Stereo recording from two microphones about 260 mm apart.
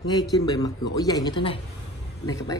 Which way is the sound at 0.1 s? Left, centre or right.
Centre.